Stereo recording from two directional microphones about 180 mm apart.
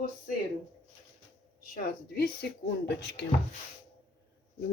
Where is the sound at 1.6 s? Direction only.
50° left (ahead or behind).